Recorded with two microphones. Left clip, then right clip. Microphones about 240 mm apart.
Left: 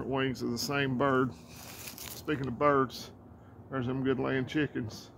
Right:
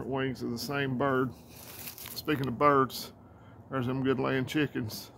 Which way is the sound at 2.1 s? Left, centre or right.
Right.